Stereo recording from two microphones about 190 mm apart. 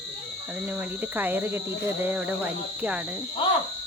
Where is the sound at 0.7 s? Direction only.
10° right (ahead or behind).